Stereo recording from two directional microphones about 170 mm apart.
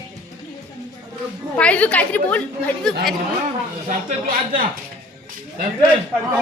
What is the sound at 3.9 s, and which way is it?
Speech, 55° right (ahead or behind).